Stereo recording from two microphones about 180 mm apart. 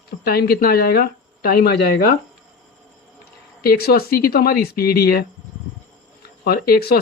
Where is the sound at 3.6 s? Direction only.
60° left (ahead or behind).